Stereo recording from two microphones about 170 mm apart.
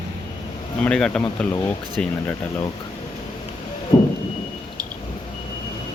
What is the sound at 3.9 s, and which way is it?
Vehicle, 20° left (ahead or behind).